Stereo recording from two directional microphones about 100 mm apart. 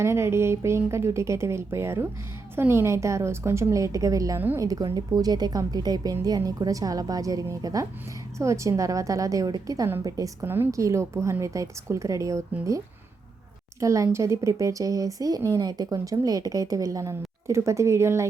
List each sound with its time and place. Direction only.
0.0 s speech: 25° right (ahead or behind)
4.4 s speech: 20° right (ahead or behind)
4.6 s a woman's voice: 40° right (ahead or behind)
10.4 s a woman's voice: 20° right (ahead or behind)